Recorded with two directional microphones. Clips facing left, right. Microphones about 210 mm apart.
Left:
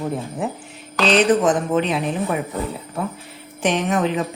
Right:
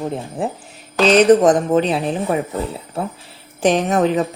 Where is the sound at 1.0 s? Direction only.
40° right (ahead or behind).